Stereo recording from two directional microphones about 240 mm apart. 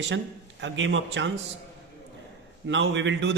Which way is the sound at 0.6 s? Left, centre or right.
Right.